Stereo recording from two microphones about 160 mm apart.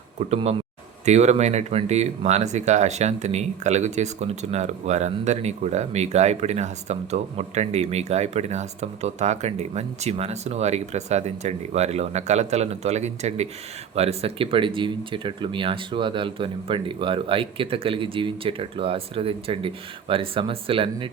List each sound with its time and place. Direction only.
1.0 s speech: 45° right (ahead or behind)